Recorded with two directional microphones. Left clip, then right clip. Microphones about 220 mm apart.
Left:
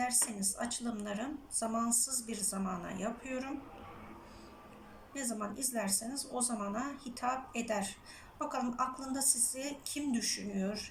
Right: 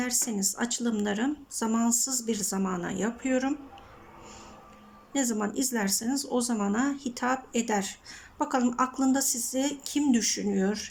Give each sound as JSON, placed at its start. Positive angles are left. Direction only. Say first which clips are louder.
{"t": 0.3, "sound": "a woman's voice", "louder": "right 8 dB", "side_deg": -45}
{"t": 5.1, "sound": "a woman's voice", "louder": "right 11 dB", "side_deg": -45}